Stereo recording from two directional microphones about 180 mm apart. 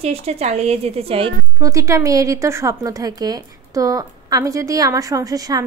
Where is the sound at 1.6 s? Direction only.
20° right (ahead or behind).